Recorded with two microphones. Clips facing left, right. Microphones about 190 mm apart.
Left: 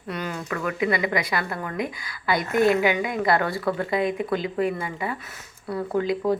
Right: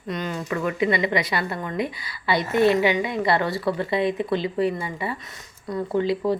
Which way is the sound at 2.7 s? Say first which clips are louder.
Right 1 dB; 5° left (ahead or behind).